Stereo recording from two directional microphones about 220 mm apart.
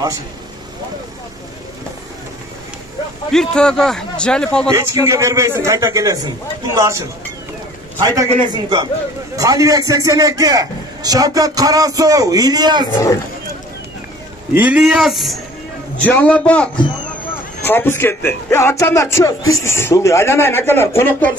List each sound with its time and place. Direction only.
3.3 s a man's voice: 5° left (ahead or behind)
4.7 s a man's voice: 15° right (ahead or behind)
12.9 s speech: 15° left (ahead or behind)
14.5 s a man's voice: 5° right (ahead or behind); by 21.3 s 10° left (ahead or behind)